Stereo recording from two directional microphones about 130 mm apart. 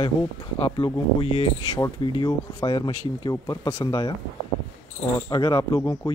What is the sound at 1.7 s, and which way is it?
Speech, 30° left (ahead or behind).